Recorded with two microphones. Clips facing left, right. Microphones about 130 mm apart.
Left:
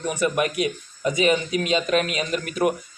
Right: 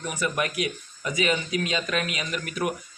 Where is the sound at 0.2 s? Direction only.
25° left (ahead or behind).